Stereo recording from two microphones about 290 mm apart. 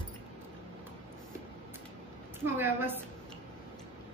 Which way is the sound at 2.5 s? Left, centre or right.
Centre.